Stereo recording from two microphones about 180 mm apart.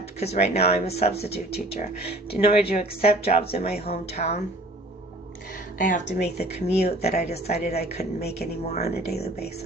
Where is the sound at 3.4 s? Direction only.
35° left (ahead or behind).